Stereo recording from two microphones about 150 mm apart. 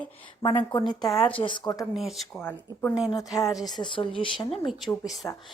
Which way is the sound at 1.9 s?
Centre (ahead or behind).